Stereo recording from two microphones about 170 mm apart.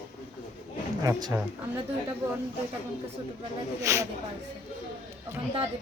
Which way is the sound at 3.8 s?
20° right (ahead or behind).